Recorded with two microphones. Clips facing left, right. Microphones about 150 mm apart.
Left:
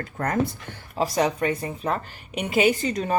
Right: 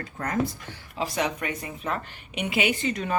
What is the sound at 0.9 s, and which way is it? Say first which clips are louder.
A woman's voice: left 5 dB; 40° left (ahead or behind).